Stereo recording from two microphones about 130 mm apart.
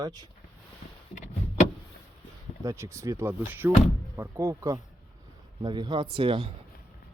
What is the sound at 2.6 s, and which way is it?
Speech, 20° right (ahead or behind).